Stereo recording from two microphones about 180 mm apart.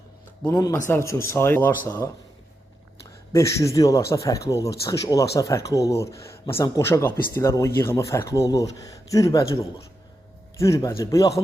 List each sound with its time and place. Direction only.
0.4 s speech: 20° left (ahead or behind)
3.3 s speech: 15° left (ahead or behind)